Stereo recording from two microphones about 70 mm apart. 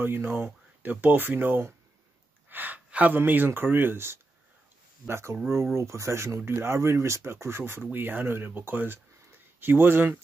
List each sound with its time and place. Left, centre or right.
0.0 s speech: right